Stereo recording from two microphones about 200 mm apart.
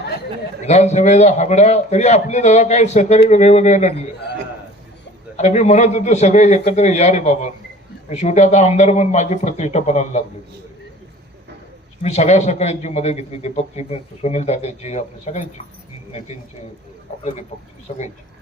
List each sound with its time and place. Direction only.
0.6 s a man's voice: 35° left (ahead or behind)
5.4 s a man's voice: 35° left (ahead or behind)
12.0 s a man's voice: 35° left (ahead or behind)
17.9 s a man's voice: 40° left (ahead or behind)